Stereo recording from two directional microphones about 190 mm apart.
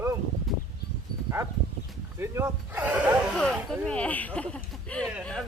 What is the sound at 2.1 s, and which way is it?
Speech, 15° right (ahead or behind).